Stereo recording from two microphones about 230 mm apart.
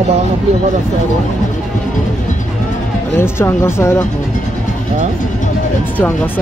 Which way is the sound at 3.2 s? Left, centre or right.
Centre.